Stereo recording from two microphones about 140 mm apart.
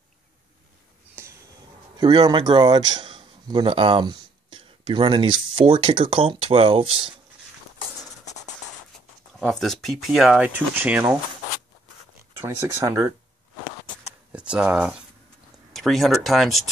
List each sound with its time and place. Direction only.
1.2 s a sound: 15° right (ahead or behind)
2.0 s a man's voice: 30° right (ahead or behind)
9.4 s speech: 5° left (ahead or behind)
10.8 s speech: 15° right (ahead or behind)
12.4 s speech: 20° right (ahead or behind)
14.3 s speech: 5° right (ahead or behind)